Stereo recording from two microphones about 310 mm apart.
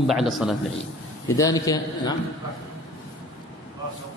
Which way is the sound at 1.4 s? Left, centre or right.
Centre.